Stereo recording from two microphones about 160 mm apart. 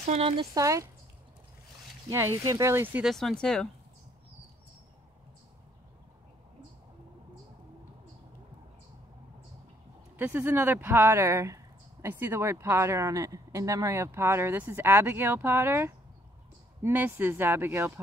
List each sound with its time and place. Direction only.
0.0 s speech: 40° right (ahead or behind)
0.6 s speech: 20° right (ahead or behind)
2.0 s speech: 20° right (ahead or behind)
3.1 s speech: centre (ahead or behind)
10.1 s speech: 10° right (ahead or behind)